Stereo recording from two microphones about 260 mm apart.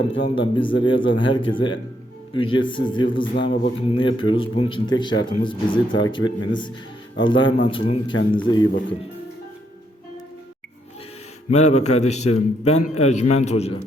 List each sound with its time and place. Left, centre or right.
0.2 s speech: centre
3.3 s speech: left
3.6 s a man's voice: left
11.4 s speech: left